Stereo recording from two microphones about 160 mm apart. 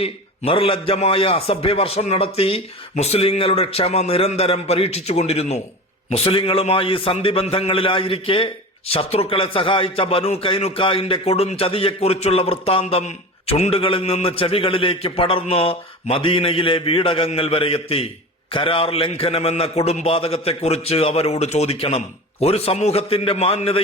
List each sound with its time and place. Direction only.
0.0 s a man's voice: 35° left (ahead or behind)